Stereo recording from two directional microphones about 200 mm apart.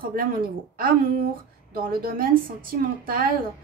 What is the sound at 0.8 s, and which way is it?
A woman's voice, 45° right (ahead or behind).